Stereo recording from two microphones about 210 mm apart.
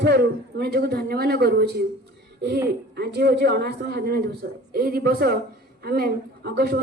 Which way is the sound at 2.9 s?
50° right (ahead or behind).